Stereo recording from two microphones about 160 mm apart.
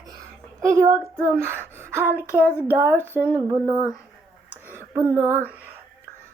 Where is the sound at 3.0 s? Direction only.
15° left (ahead or behind).